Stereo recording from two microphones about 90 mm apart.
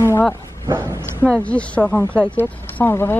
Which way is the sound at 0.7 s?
30° right (ahead or behind).